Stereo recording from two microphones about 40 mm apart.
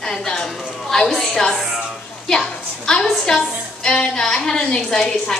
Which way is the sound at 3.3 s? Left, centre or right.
Left.